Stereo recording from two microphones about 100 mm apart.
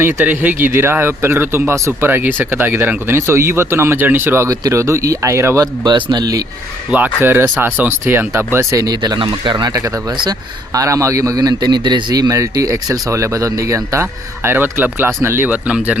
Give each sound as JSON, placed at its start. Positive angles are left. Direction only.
{"t": 0.0, "sound": "speech", "side_deg": -20}
{"t": 5.8, "sound": "speech", "side_deg": -45}
{"t": 6.9, "sound": "speech", "side_deg": -20}
{"t": 8.5, "sound": "speech", "side_deg": -35}
{"t": 9.7, "sound": "a man's voice", "side_deg": -30}